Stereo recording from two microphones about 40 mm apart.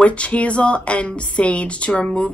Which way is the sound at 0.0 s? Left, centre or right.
Left.